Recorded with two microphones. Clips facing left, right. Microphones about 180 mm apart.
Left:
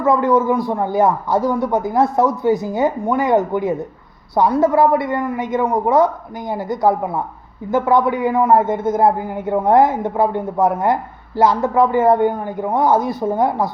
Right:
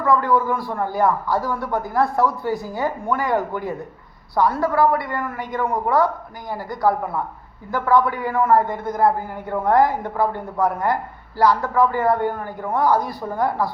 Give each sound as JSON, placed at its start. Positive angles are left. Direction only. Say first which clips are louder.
{"t": 0.0, "sound": "a man's voice", "louder": "left 4 dB", "side_deg": 20}